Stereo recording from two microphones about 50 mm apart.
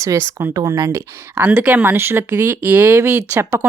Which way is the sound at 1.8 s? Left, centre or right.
Right.